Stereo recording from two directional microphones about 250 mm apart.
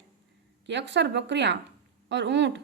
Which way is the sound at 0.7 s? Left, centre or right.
Right.